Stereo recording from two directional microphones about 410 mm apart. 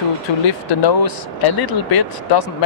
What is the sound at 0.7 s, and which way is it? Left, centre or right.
Speech, left.